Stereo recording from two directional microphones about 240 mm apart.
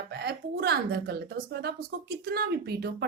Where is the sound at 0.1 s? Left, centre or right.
Right.